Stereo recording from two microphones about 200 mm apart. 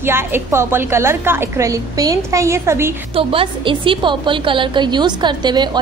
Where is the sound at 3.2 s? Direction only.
25° right (ahead or behind).